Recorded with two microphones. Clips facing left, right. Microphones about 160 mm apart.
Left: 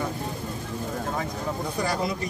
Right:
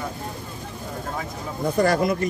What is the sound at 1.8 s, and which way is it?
Speech, 50° right (ahead or behind).